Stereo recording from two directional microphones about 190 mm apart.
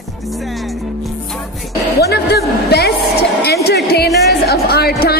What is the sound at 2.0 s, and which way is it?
A woman's voice, 60° left (ahead or behind).